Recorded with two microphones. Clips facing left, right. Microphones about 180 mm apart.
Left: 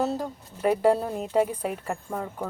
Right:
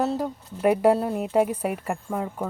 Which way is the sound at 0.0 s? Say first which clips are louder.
Right 2 dB; 10° right (ahead or behind).